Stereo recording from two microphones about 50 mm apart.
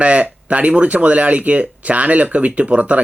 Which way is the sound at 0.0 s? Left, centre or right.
Right.